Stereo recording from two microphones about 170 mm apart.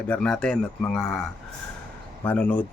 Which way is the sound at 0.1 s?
5° left (ahead or behind).